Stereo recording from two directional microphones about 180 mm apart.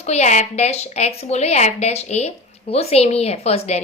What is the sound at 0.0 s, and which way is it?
A woman's voice, 40° left (ahead or behind).